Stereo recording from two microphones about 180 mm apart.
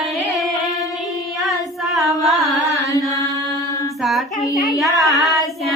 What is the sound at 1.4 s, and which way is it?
Singing, centre (ahead or behind).